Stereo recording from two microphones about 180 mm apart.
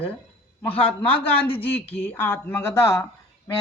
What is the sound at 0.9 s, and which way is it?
Speech, 5° left (ahead or behind).